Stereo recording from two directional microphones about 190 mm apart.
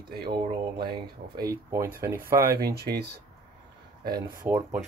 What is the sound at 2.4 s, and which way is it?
Speech, 55° right (ahead or behind).